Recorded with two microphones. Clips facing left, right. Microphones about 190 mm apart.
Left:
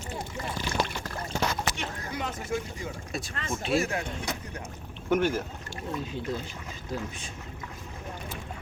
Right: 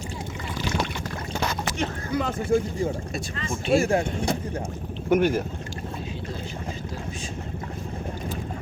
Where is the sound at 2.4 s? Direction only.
30° right (ahead or behind).